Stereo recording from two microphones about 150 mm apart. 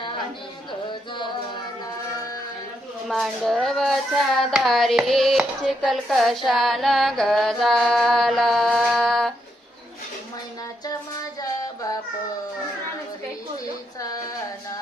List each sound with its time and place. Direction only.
3.1 s speech: centre (ahead or behind)
10.8 s music: 25° left (ahead or behind)